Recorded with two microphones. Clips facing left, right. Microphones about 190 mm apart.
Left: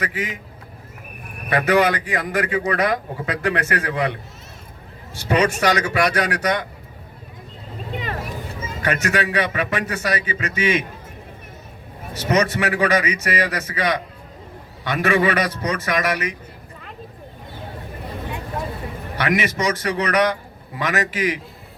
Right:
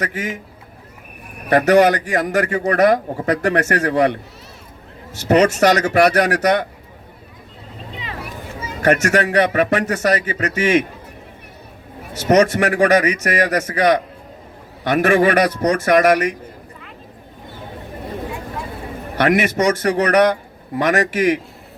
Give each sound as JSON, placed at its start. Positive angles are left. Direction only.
{"t": 0.0, "sound": "a man's voice", "side_deg": -45}
{"t": 1.5, "sound": "a man's voice", "side_deg": -45}
{"t": 5.3, "sound": "a man's voice", "side_deg": -45}
{"t": 7.9, "sound": "vehicle", "side_deg": 50}
{"t": 8.8, "sound": "a man's voice", "side_deg": -45}
{"t": 12.3, "sound": "a man's voice", "side_deg": -45}
{"t": 19.1, "sound": "a man's voice", "side_deg": -45}